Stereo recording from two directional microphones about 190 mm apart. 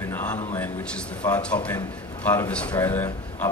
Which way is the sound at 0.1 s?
10° left (ahead or behind).